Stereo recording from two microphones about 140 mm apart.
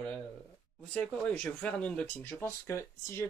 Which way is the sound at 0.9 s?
5° left (ahead or behind).